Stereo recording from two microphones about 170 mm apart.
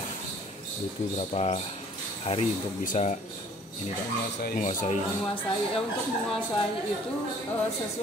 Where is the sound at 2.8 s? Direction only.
50° left (ahead or behind).